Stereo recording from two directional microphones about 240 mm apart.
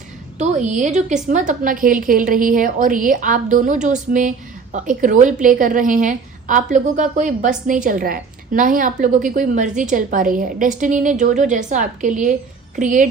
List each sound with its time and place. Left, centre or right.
0.3 s a woman's voice: right